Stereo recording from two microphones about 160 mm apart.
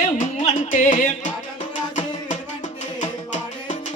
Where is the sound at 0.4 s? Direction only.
50° left (ahead or behind).